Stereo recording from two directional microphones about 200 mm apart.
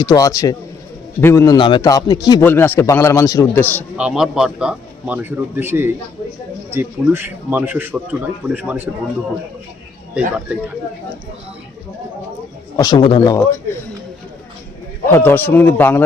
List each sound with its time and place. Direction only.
0.0 s a man's voice: 20° left (ahead or behind)
3.9 s a man's voice: 5° right (ahead or behind)
10.2 s a man's voice: 5° right (ahead or behind)
12.7 s a man's voice: 20° left (ahead or behind)
15.0 s a man's voice: 10° left (ahead or behind)